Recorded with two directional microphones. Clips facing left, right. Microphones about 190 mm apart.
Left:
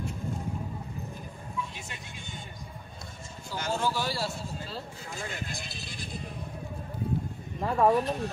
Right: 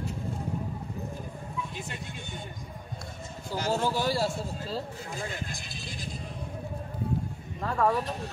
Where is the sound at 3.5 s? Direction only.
35° right (ahead or behind).